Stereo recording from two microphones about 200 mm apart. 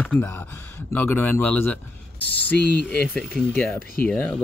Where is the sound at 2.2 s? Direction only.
55° left (ahead or behind).